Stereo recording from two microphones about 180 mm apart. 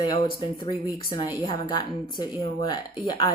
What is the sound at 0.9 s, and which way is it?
Speech, 20° left (ahead or behind).